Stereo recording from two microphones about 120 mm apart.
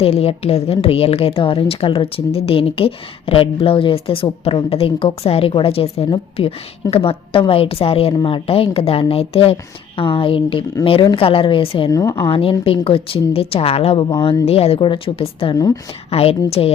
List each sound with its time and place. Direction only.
0.0 s a woman's voice: 55° left (ahead or behind)
11.9 s a woman's voice: 30° left (ahead or behind)
12.3 s a woman's voice: 50° left (ahead or behind)
15.5 s a woman's voice: 30° left (ahead or behind)
16.0 s a woman's voice: 55° left (ahead or behind)